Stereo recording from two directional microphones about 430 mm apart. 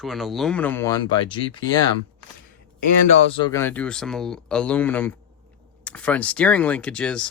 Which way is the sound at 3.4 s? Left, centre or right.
Centre.